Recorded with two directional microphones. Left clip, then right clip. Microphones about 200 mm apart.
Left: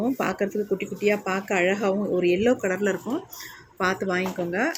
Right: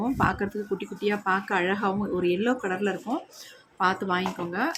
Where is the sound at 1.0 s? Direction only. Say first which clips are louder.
Left 1 dB; 5° left (ahead or behind).